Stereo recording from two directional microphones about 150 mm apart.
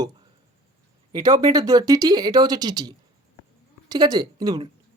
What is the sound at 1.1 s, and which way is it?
Speech, 25° right (ahead or behind).